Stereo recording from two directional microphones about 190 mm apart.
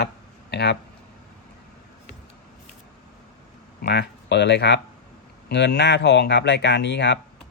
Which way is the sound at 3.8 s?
60° left (ahead or behind).